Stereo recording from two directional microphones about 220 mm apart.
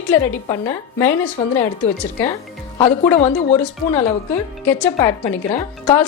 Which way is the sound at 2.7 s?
20° left (ahead or behind).